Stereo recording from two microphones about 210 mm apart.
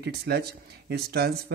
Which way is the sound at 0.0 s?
50° right (ahead or behind).